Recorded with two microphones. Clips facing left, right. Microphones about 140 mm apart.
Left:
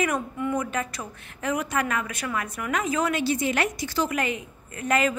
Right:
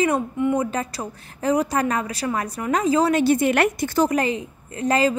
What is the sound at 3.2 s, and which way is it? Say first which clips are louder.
A woman's voice: right 7 dB; 55° right (ahead or behind).